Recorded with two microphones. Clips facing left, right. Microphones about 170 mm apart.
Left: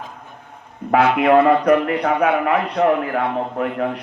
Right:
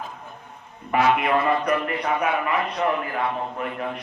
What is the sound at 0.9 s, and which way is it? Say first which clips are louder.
A man's voice: left 6 dB; 75° left (ahead or behind).